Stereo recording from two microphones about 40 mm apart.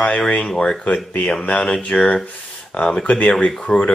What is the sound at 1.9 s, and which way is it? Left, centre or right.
Speech, centre.